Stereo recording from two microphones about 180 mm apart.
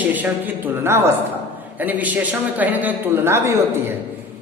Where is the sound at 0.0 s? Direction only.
10° right (ahead or behind).